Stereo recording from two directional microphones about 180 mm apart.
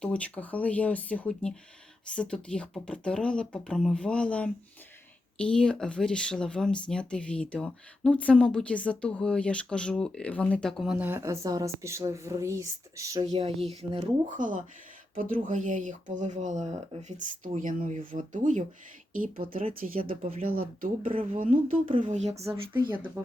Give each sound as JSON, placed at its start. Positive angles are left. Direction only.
{"t": 0.0, "sound": "speech", "side_deg": 5}
{"t": 13.7, "sound": "speech", "side_deg": -40}
{"t": 19.8, "sound": "speech", "side_deg": -50}
{"t": 21.0, "sound": "speech", "side_deg": -30}
{"t": 21.3, "sound": "speech", "side_deg": -50}
{"t": 21.8, "sound": "speech", "side_deg": -30}
{"t": 22.4, "sound": "speech", "side_deg": -10}